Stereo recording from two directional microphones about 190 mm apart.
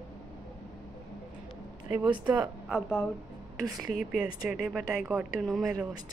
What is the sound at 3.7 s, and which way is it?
Speech, centre (ahead or behind).